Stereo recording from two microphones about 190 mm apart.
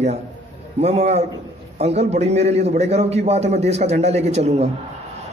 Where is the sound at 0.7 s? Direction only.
35° right (ahead or behind).